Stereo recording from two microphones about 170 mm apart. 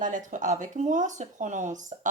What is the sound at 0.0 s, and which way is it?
A woman's voice, 50° right (ahead or behind).